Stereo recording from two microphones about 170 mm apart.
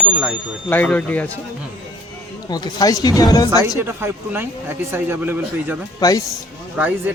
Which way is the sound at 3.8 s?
15° right (ahead or behind).